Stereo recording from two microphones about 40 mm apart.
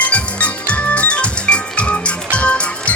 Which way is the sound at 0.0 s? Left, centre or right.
Left.